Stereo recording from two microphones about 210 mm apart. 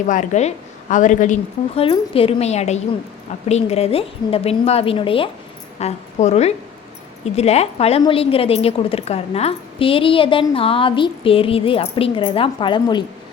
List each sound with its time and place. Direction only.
0.1 s a woman's voice: 35° left (ahead or behind)